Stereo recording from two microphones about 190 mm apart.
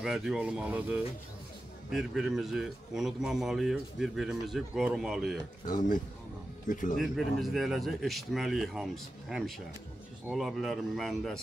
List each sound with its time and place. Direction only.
0.0 s a man's voice: 5° right (ahead or behind)
5.7 s a man's voice: 45° left (ahead or behind)
7.0 s a man's voice: centre (ahead or behind)